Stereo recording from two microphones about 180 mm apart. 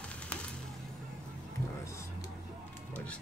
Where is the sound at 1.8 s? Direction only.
15° left (ahead or behind).